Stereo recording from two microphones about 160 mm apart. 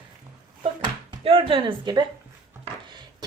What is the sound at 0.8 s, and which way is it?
A woman's voice, 30° right (ahead or behind).